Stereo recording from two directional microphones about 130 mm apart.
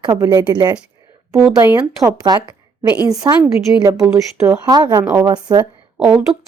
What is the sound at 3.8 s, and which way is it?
Speech, 25° right (ahead or behind).